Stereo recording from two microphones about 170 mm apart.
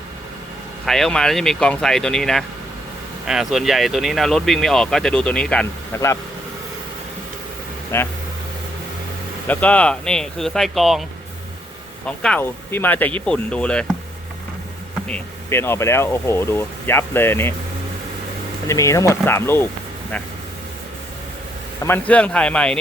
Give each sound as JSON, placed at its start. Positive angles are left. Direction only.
{"t": 0.9, "sound": "speech", "side_deg": 0}
{"t": 7.9, "sound": "speech", "side_deg": 15}
{"t": 9.5, "sound": "speech", "side_deg": 10}
{"t": 12.0, "sound": "speech", "side_deg": 5}
{"t": 15.0, "sound": "speech", "side_deg": 10}
{"t": 18.7, "sound": "speech", "side_deg": 20}
{"t": 21.8, "sound": "speech", "side_deg": 10}